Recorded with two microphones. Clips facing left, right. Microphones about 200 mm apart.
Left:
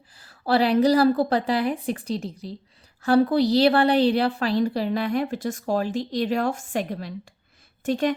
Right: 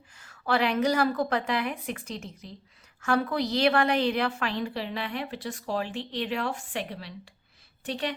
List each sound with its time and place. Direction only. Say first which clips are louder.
0.2 s a woman's voice: left 5 dB; 35° left (ahead or behind)